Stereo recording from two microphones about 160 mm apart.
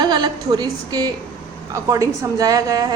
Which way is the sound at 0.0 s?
25° right (ahead or behind).